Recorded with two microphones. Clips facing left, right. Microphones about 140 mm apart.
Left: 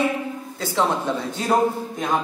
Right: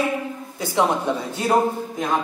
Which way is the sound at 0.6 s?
15° right (ahead or behind).